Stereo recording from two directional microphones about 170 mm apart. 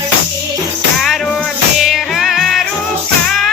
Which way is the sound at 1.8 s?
Centre (ahead or behind).